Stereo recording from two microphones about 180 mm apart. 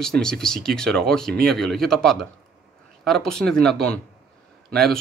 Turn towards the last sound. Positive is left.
turn(degrees=5)  # may be behind; listen again after turning